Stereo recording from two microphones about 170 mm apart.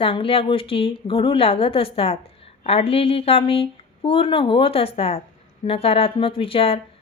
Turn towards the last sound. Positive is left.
turn(degrees=35)  # may be behind; listen again after turning